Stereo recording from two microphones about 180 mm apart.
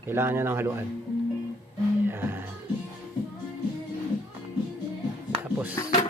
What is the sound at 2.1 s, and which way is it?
Music, 10° right (ahead or behind).